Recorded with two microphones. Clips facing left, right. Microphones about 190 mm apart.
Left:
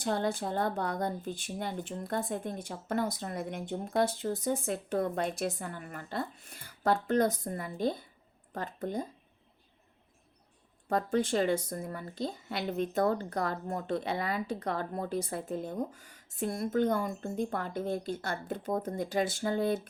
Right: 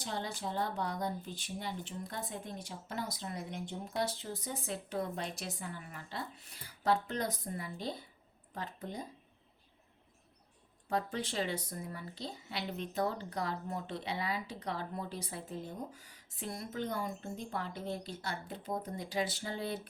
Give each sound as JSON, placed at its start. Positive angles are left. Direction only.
{"t": 0.0, "sound": "speech", "side_deg": 55}
{"t": 10.8, "sound": "speech", "side_deg": 50}